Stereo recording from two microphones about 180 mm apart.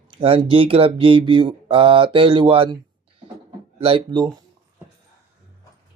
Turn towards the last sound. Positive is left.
turn(degrees=-25)  # may be behind; listen again after turning